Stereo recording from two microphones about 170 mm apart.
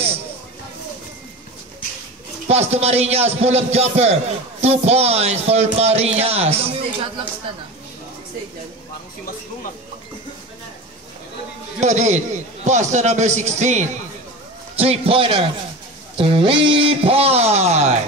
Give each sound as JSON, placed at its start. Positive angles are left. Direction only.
{"t": 2.4, "sound": "a man's voice", "side_deg": -40}
{"t": 11.8, "sound": "a man's voice", "side_deg": -45}